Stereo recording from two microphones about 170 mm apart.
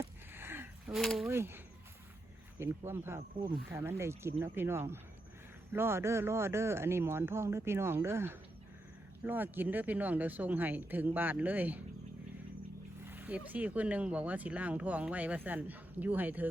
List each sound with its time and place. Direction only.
0.0 s a sound: 15° right (ahead or behind)
0.9 s speech: centre (ahead or behind)
1.3 s speech: 15° right (ahead or behind)
3.2 s speech: 30° right (ahead or behind)
3.7 s speech: 15° right (ahead or behind)
13.1 s speech: 10° right (ahead or behind)